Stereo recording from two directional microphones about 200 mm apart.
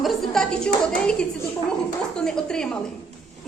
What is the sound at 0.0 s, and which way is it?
A woman's voice, centre (ahead or behind).